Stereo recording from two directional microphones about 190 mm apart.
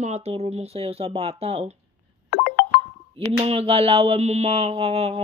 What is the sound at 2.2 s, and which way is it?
Music, 60° left (ahead or behind).